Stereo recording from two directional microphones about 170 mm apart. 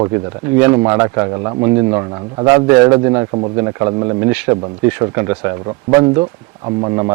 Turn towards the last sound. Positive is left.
turn(degrees=-25)  # may be behind; listen again after turning